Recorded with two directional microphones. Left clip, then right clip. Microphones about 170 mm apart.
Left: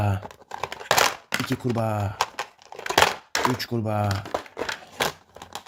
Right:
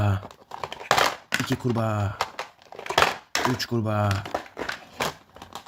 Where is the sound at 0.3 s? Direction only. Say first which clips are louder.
Left 2 dB; 40° left (ahead or behind).